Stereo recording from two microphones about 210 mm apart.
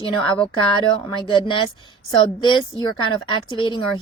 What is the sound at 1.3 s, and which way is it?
Speech, 20° left (ahead or behind).